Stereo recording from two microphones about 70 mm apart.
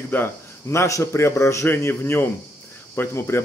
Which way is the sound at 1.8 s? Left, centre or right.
Left.